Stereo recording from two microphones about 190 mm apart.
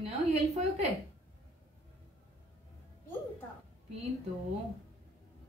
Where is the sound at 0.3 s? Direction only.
35° right (ahead or behind).